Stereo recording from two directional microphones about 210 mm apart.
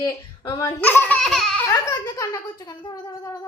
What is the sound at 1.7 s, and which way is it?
Speech, 15° left (ahead or behind).